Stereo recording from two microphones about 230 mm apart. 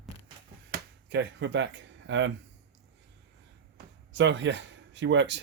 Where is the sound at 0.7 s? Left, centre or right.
Right.